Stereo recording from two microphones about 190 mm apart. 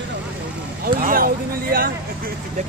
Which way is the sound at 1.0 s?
50° right (ahead or behind).